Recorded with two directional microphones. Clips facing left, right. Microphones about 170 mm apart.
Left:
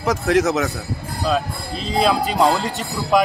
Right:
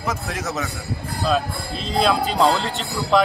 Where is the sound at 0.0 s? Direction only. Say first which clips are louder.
Left 9 dB; 90° left.